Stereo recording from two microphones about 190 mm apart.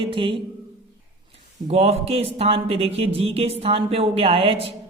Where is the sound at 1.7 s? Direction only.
35° right (ahead or behind).